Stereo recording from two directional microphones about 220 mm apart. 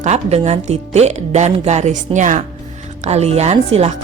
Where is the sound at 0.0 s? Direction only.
30° right (ahead or behind).